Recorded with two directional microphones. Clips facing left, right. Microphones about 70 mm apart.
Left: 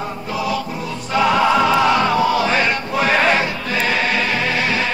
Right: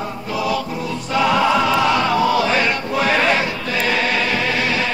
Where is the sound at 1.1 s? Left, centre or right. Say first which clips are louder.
Left 1 dB; left.